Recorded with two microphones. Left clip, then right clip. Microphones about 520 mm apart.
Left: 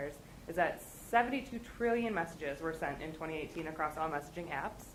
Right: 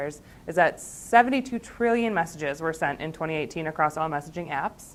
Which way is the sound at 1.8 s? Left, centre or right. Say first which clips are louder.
Right 10 dB; right.